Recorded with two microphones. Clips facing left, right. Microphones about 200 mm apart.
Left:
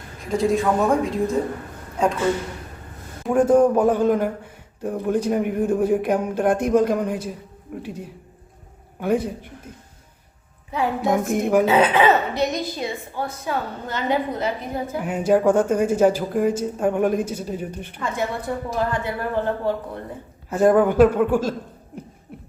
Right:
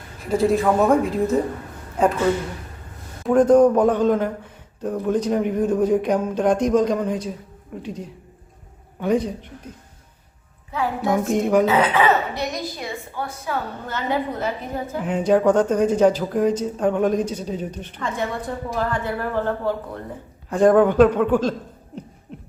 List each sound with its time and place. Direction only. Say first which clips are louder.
0.3 s a man's voice: right 2 dB; centre (ahead or behind)
3.2 s speech: right 2 dB; 10° left (ahead or behind)
10.7 s speech: left 1 dB; 20° left (ahead or behind)
11.3 s a man's voice: right 2 dB; centre (ahead or behind)
11.6 s a woman's voice: left 1 dB; 20° left (ahead or behind)
22.3 s beatboxing: right 2 dB; 10° left (ahead or behind)